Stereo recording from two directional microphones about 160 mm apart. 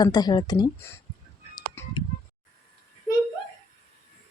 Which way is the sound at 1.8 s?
15° left (ahead or behind).